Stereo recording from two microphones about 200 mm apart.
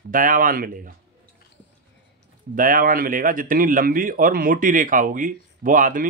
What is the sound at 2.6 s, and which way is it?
A man's voice, 45° right (ahead or behind).